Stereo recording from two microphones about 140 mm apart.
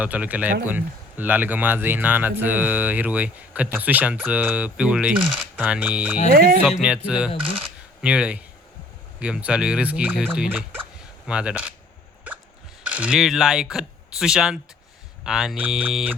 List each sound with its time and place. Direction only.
0.0 s speech: 10° right (ahead or behind)
12.8 s speech: 10° right (ahead or behind)